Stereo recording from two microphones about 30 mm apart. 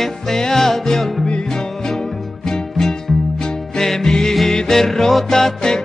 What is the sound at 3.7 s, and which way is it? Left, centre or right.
Music, centre.